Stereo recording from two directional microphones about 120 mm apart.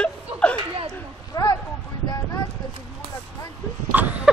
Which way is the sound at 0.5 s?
50° right (ahead or behind).